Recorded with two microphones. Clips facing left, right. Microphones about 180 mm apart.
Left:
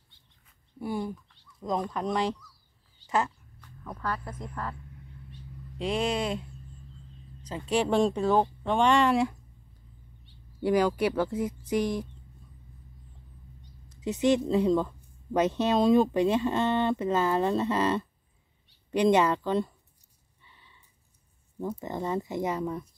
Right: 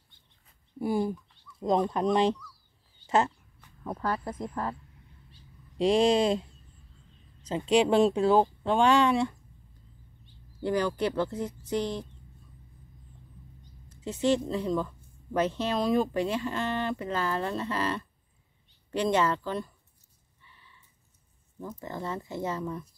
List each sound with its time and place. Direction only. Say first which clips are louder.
0.7 s speech: right 4 dB; 25° right (ahead or behind)
3.1 s a sound: right 3 dB; 25° right (ahead or behind)
3.8 s speech: right 3 dB; 30° right (ahead or behind)
5.3 s a sound: left 10 dB; 30° right (ahead or behind)
7.4 s speech: right 4 dB; 25° right (ahead or behind); by 9.3 s centre (ahead or behind)
10.6 s speech: left 3 dB; 10° left (ahead or behind)
13.8 s speech: left 2 dB; 15° left (ahead or behind)
20.4 s a sound: even; 20° left (ahead or behind)
21.7 s speech: left 3 dB; 20° left (ahead or behind)